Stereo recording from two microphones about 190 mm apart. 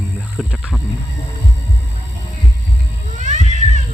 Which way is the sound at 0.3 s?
Centre (ahead or behind).